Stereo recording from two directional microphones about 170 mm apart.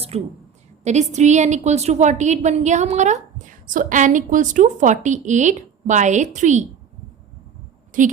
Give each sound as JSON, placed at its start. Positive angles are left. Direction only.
{"t": 0.1, "sound": "a woman's voice", "side_deg": -40}
{"t": 7.9, "sound": "a woman's voice", "side_deg": -50}